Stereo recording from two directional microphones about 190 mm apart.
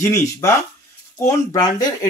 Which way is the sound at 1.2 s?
20° left (ahead or behind).